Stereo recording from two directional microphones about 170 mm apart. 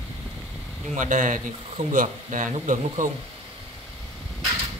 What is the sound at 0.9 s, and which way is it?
Speech, 50° right (ahead or behind).